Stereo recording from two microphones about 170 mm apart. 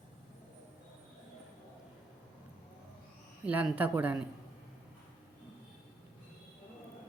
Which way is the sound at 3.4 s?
5° right (ahead or behind).